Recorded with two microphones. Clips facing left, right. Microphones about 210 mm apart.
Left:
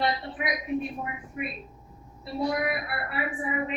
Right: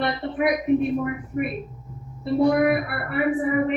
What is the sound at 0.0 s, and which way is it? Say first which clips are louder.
A woman's voice: right 6 dB; 60° right (ahead or behind).